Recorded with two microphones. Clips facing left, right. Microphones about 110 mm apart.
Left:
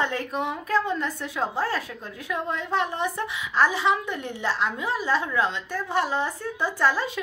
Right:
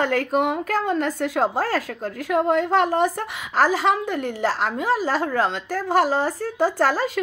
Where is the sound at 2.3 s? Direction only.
65° right (ahead or behind).